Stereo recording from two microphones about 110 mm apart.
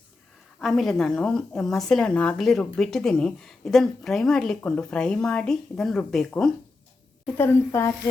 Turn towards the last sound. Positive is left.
turn(degrees=20)  # may be behind; listen again after turning